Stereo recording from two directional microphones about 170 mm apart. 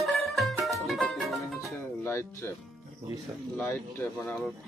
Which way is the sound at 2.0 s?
15° left (ahead or behind).